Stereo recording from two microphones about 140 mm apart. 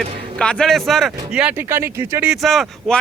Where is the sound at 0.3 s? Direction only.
5° left (ahead or behind); by 2.3 s 20° right (ahead or behind).